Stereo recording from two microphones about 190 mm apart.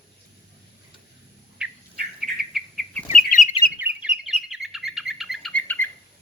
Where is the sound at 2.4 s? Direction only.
Centre (ahead or behind).